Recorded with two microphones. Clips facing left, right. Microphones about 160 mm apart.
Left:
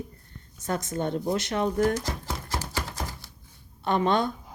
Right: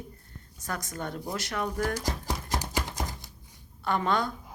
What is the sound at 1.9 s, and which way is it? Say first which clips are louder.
Music: left 2 dB; 10° right (ahead or behind).